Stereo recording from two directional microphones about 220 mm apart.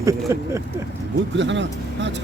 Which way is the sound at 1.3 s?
55° right (ahead or behind).